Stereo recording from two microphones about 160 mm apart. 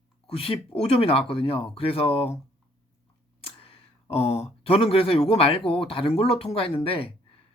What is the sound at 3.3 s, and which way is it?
A man's voice, 35° left (ahead or behind).